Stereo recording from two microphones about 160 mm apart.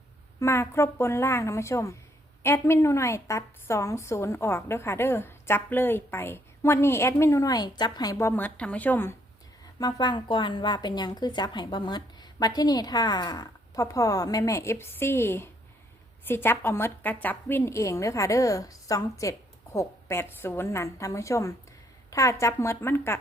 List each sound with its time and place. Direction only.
0.3 s a woman's voice: 15° left (ahead or behind)
9.7 s a woman's voice: 25° left (ahead or behind)